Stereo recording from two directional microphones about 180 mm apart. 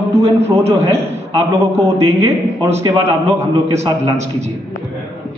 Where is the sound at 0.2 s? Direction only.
35° right (ahead or behind).